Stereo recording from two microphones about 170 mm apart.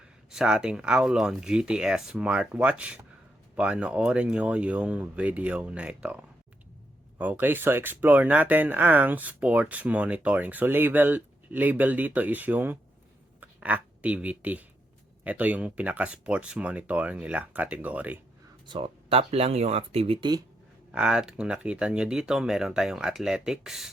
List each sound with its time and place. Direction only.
0.3 s speech: 5° right (ahead or behind)
7.2 s speech: 10° right (ahead or behind)
18.6 s speech: 30° right (ahead or behind)
20.9 s speech: 5° right (ahead or behind)